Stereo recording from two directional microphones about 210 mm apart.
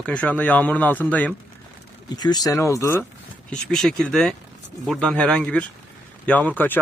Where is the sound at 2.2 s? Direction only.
20° left (ahead or behind).